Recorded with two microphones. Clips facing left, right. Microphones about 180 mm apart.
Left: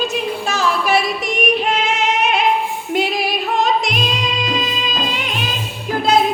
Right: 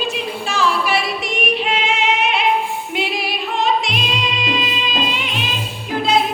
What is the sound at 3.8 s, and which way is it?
Music, 40° left (ahead or behind).